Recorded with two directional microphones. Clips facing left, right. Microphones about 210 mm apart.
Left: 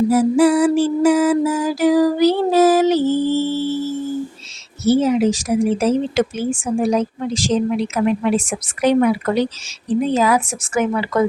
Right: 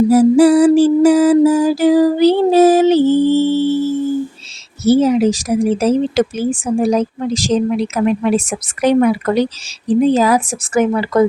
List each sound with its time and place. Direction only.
0.1 s mantra: 35° right (ahead or behind)
4.8 s speech: 35° right (ahead or behind)
9.8 s speech: 35° right (ahead or behind)